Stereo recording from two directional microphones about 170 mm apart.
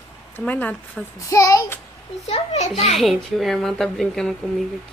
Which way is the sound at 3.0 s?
Centre (ahead or behind).